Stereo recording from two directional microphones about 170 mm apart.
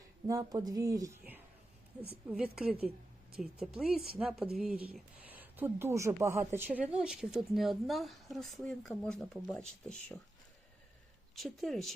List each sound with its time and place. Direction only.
0.3 s speech: 20° right (ahead or behind); by 9.6 s 5° left (ahead or behind)
11.3 s speech: centre (ahead or behind)